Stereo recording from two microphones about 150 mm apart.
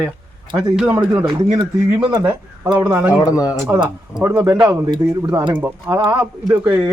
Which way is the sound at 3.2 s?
25° left (ahead or behind).